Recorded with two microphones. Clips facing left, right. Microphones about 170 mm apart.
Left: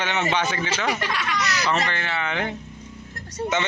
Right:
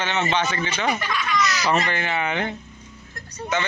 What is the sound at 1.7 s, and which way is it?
Speech, 10° right (ahead or behind).